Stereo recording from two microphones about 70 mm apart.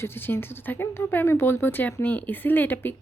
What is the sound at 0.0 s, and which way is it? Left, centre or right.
A woman's voice, left.